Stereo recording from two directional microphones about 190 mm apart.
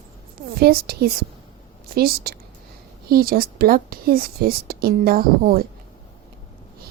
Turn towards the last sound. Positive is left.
turn(degrees=-50)  # may be behind; listen again after turning